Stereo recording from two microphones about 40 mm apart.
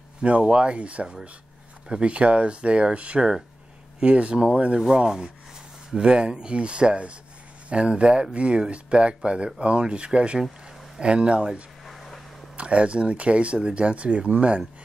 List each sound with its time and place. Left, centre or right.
0.2 s speech: right
4.7 s rub: centre
5.9 s speech: right
11.8 s a sound: centre
12.5 s speech: right